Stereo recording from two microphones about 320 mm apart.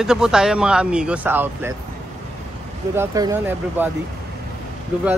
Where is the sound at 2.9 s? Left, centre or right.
Centre.